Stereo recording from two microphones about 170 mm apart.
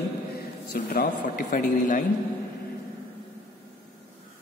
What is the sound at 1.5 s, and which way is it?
Speech, 50° left (ahead or behind).